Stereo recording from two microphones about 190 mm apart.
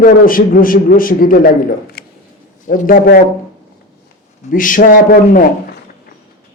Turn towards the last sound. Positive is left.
turn(degrees=45)  # may be behind; listen again after turning